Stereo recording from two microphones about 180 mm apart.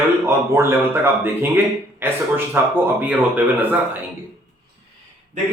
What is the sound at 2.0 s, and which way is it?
A man's voice, 10° right (ahead or behind).